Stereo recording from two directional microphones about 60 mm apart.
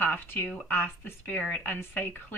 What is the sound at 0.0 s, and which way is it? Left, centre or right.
Speech, left.